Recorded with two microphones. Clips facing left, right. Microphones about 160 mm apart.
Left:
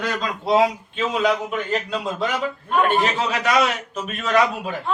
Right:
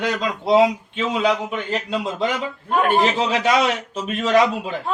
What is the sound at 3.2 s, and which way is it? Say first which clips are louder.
Speech: right 2 dB; 30° right (ahead or behind).